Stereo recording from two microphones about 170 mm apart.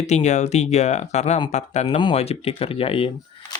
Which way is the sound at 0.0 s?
40° left (ahead or behind).